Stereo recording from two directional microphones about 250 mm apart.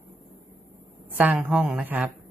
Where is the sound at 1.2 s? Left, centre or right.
Centre.